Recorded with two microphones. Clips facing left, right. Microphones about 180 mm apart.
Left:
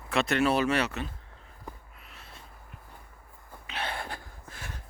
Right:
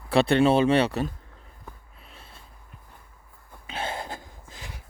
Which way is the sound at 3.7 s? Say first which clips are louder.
Right 3 dB; 25° right (ahead or behind).